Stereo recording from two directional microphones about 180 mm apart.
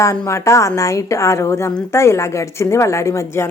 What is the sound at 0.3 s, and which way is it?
A woman's voice, 15° left (ahead or behind).